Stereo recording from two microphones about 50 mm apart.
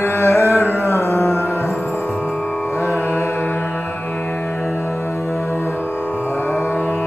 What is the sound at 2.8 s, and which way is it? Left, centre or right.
Music, left.